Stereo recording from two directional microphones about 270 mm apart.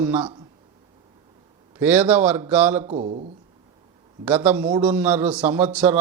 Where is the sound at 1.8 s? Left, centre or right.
Centre.